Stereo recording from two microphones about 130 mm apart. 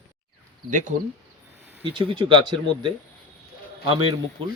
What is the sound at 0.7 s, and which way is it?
Speech, 75° right (ahead or behind).